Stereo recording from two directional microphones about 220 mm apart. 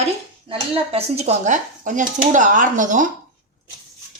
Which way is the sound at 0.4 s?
25° right (ahead or behind).